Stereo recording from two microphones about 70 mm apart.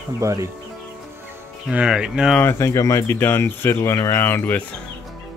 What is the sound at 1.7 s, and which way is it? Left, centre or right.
Speech, centre.